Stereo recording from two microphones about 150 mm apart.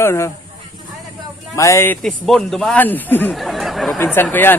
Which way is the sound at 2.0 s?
Centre (ahead or behind).